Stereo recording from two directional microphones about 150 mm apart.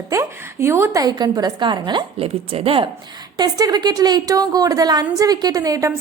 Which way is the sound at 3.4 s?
25° right (ahead or behind).